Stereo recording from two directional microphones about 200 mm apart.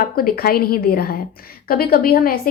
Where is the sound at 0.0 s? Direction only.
45° left (ahead or behind).